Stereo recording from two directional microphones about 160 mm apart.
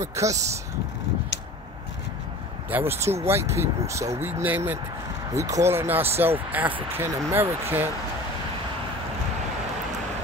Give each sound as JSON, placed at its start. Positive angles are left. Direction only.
{"t": 0.0, "sound": "speech", "side_deg": -20}
{"t": 2.7, "sound": "speech", "side_deg": -15}